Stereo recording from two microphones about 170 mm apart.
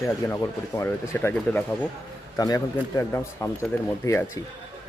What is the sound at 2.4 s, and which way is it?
Speech, 20° left (ahead or behind).